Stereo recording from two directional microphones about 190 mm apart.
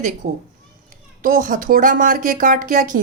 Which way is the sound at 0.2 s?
45° right (ahead or behind).